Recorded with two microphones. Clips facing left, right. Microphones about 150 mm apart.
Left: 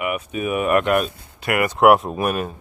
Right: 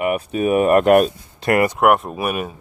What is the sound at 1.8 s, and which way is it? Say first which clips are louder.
Speech: left 2 dB; centre (ahead or behind).